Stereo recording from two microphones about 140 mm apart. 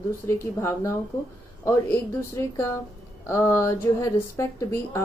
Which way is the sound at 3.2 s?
20° left (ahead or behind).